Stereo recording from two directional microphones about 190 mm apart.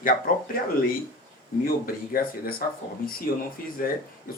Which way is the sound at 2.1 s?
50° left (ahead or behind).